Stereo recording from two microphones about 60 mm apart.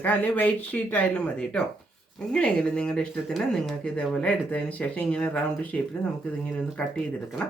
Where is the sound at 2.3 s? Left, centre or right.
Centre.